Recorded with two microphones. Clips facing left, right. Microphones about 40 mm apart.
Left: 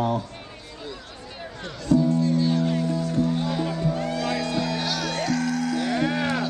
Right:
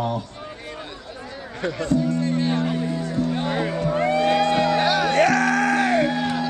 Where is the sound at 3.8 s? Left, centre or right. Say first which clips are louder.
Right 6 dB; right.